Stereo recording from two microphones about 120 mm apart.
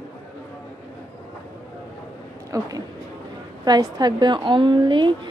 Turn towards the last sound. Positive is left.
turn(degrees=-40)  # may be behind; listen again after turning